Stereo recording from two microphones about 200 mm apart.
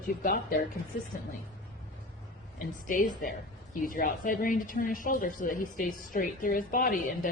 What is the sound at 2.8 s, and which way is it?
A woman's voice, 40° left (ahead or behind).